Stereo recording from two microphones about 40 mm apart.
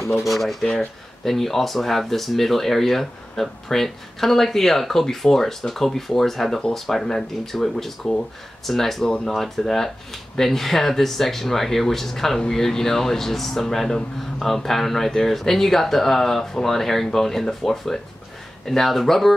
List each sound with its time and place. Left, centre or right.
0.1 s speech: centre
9.0 s speech: centre